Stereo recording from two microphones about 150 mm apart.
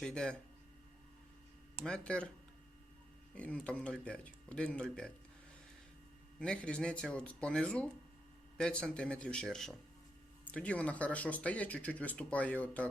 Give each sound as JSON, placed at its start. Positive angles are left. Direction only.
{"t": 0.0, "sound": "speech", "side_deg": 5}
{"t": 1.8, "sound": "speech", "side_deg": 5}
{"t": 3.3, "sound": "speech", "side_deg": 10}
{"t": 6.4, "sound": "speech", "side_deg": 5}